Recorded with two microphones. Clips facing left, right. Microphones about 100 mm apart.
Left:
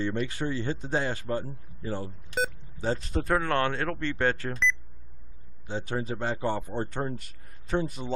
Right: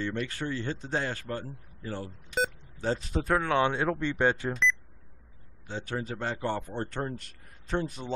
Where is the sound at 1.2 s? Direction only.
20° left (ahead or behind).